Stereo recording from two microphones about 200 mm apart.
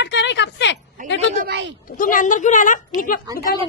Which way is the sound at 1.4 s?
60° right (ahead or behind).